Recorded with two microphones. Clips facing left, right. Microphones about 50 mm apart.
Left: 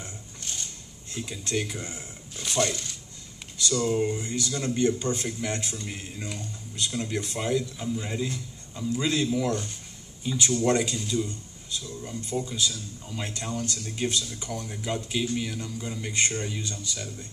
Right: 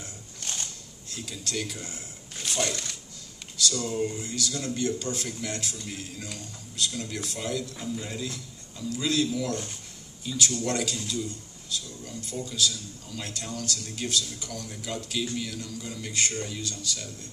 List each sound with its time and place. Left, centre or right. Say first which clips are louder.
1.1 s speech: left 4 dB; left
2.4 s a sound: left 3 dB; centre
3.7 s speech: left 9 dB; centre